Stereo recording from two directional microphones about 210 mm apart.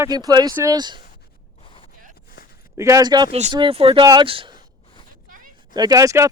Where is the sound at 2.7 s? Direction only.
15° right (ahead or behind).